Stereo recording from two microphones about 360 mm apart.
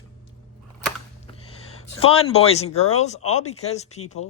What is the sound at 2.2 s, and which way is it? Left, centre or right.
Speech, centre.